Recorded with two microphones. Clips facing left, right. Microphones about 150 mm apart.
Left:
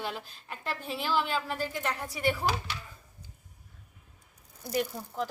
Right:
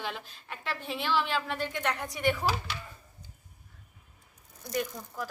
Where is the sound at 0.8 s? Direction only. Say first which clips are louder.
Even; 40° left (ahead or behind).